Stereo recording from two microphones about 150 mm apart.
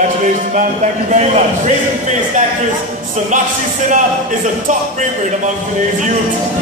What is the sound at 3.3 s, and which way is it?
Speech, 55° right (ahead or behind).